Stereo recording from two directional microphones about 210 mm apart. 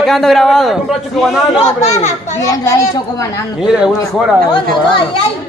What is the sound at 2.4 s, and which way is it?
A man's voice, 15° left (ahead or behind).